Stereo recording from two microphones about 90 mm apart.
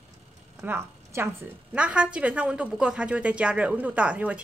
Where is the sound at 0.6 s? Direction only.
30° right (ahead or behind).